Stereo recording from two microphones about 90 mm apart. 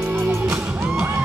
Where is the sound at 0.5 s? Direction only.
5° right (ahead or behind).